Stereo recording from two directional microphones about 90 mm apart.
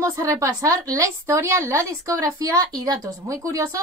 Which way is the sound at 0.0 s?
35° right (ahead or behind).